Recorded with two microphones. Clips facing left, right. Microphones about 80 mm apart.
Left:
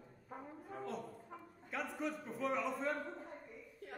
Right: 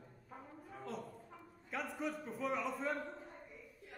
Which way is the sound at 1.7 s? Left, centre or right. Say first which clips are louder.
Even; centre.